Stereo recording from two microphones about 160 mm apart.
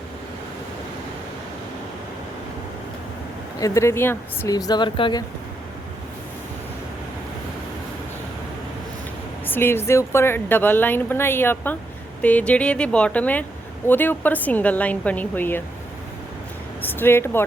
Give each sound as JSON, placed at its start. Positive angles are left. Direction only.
{"t": 3.6, "sound": "speech", "side_deg": 15}
{"t": 9.5, "sound": "a woman's voice", "side_deg": 15}
{"t": 16.8, "sound": "a woman's voice", "side_deg": 15}